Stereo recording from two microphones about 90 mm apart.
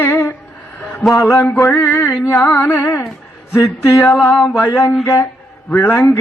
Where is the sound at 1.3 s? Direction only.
30° left (ahead or behind).